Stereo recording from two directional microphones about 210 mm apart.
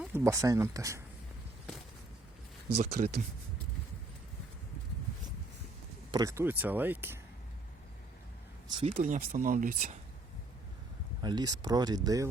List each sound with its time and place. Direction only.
0.0 s speech: 10° right (ahead or behind)
2.9 s speech: 45° right (ahead or behind)
6.1 s speech: 15° right (ahead or behind)
8.6 s speech: 20° right (ahead or behind)
8.9 s speech: 35° right (ahead or behind)
11.2 s speech: 20° right (ahead or behind)